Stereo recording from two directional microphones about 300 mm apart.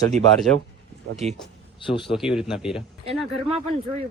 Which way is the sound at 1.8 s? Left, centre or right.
Centre.